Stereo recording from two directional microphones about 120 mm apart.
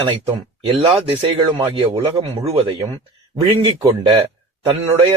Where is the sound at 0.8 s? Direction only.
50° right (ahead or behind).